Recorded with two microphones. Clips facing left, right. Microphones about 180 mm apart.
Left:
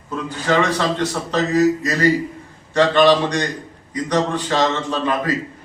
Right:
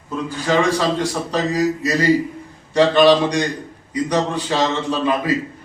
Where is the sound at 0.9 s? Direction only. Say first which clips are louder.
Even; 10° right (ahead or behind).